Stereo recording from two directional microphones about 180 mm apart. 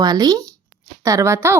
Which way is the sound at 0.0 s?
20° right (ahead or behind).